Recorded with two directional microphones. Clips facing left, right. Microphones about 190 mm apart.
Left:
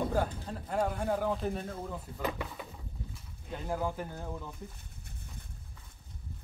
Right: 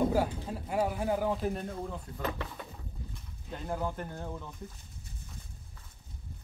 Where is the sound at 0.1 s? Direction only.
10° right (ahead or behind).